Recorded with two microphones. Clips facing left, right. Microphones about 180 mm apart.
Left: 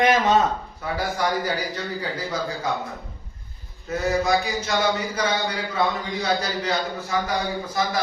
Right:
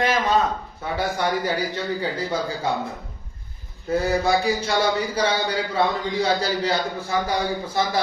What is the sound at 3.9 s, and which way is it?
Mantra, 30° right (ahead or behind).